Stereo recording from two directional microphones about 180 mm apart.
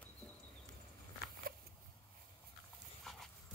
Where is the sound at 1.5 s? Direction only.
55° right (ahead or behind).